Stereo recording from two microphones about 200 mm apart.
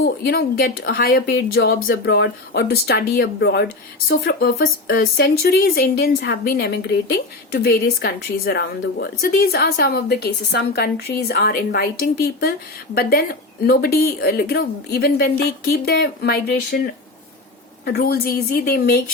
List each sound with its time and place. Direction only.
0.0 s speech: 50° left (ahead or behind)